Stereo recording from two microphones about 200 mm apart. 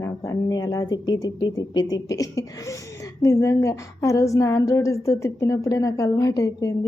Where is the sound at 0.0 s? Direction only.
15° left (ahead or behind).